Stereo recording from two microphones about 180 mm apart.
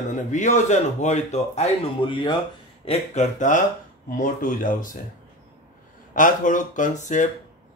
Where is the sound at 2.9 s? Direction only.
40° left (ahead or behind).